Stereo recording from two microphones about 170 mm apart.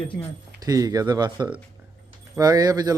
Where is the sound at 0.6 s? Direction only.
20° right (ahead or behind).